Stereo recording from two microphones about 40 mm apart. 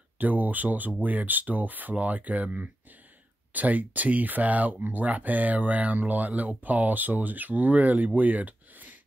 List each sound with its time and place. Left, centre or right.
0.2 s speech: right